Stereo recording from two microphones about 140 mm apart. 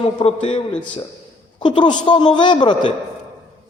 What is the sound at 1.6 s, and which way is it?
A man's voice, 35° left (ahead or behind).